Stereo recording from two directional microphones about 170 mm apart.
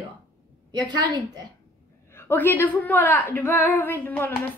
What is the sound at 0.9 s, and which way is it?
Speech, 25° right (ahead or behind).